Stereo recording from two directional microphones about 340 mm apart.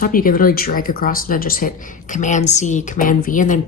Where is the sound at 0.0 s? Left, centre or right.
Left.